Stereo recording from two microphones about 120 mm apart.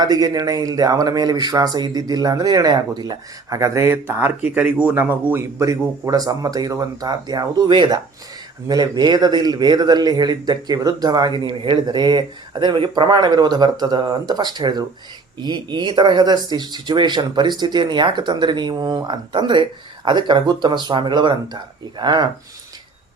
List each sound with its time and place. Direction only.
0.0 s speech: 30° right (ahead or behind)